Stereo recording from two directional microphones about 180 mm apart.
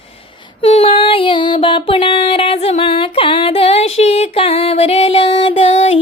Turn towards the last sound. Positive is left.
turn(degrees=30)  # may be behind; listen again after turning